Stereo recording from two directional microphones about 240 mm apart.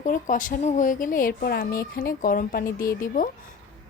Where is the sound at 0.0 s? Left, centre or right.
Left.